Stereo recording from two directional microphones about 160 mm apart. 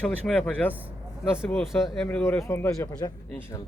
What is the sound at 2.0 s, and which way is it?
Speech, 10° left (ahead or behind).